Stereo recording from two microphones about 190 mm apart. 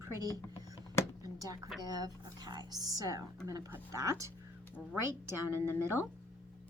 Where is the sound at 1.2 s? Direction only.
20° right (ahead or behind).